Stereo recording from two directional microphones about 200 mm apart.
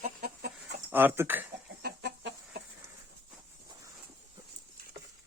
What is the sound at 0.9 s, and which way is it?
Speech, 10° right (ahead or behind).